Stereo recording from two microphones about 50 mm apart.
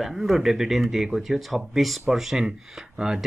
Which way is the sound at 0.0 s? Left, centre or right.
Centre.